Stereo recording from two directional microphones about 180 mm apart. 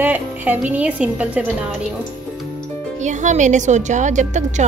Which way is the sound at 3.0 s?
40° right (ahead or behind).